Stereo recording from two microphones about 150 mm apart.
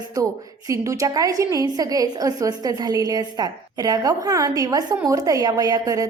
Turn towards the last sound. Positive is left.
turn(degrees=-25)  # may be behind; listen again after turning